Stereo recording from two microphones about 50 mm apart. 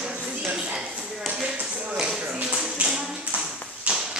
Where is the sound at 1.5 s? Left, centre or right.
Right.